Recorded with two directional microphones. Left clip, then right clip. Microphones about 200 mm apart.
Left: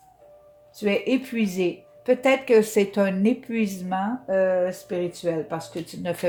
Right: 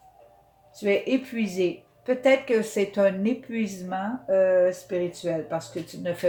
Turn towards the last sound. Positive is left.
turn(degrees=40)  # may be behind; listen again after turning